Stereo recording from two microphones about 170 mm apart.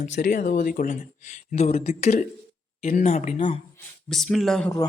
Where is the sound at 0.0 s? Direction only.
50° left (ahead or behind).